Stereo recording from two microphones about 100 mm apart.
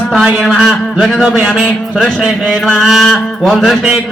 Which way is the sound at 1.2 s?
10° right (ahead or behind).